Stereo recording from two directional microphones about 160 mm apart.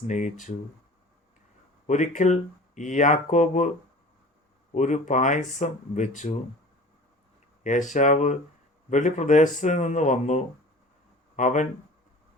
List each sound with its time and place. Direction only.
0.1 s speech: 50° left (ahead or behind)
1.9 s speech: 50° left (ahead or behind)
4.7 s speech: 50° left (ahead or behind)
7.6 s speech: 50° left (ahead or behind)